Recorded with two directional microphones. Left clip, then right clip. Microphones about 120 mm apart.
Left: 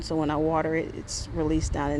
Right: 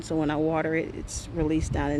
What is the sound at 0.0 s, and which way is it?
Speech, 15° right (ahead or behind).